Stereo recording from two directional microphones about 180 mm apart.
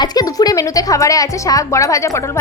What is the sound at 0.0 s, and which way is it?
Speech, 20° left (ahead or behind).